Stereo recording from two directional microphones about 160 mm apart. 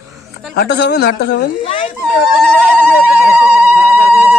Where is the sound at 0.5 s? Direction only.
85° left.